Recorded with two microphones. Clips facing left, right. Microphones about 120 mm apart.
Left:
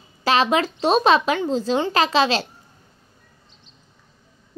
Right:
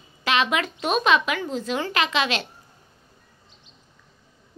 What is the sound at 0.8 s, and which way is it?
A child's voice, 35° left (ahead or behind).